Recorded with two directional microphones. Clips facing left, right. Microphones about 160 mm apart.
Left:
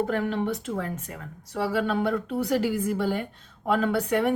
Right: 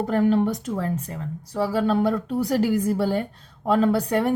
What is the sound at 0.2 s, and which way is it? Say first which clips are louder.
A woman's voice: right 7 dB; 40° right (ahead or behind).